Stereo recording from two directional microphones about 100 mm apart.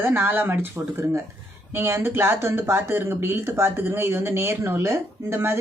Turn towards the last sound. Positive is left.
turn(degrees=-25)  # may be behind; listen again after turning